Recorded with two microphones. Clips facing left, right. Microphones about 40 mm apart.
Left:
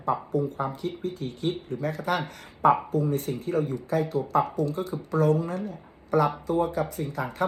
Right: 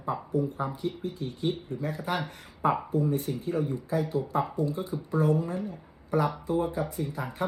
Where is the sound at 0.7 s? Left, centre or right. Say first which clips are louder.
Left 2 dB; left.